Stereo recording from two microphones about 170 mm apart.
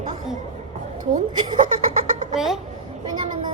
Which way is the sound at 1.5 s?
50° right (ahead or behind).